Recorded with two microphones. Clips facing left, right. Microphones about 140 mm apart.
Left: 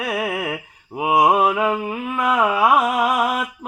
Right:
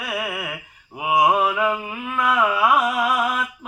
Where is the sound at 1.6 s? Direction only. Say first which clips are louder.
Left 2 dB; 40° left (ahead or behind).